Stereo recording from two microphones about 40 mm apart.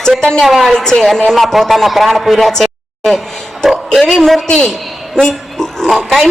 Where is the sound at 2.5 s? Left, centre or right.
Centre.